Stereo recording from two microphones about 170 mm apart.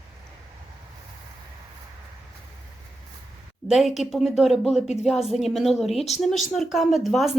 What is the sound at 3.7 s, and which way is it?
Speech, centre (ahead or behind).